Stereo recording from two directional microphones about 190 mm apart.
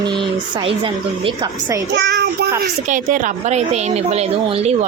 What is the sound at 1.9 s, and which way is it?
Child singing, 65° right (ahead or behind).